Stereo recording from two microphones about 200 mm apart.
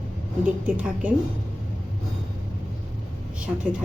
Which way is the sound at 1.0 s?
5° right (ahead or behind).